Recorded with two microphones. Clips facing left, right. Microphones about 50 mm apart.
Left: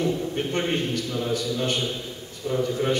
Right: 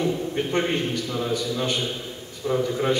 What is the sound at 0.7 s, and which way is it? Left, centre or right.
Speech, centre.